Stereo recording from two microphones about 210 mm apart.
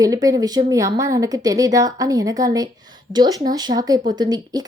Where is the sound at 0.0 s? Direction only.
15° right (ahead or behind).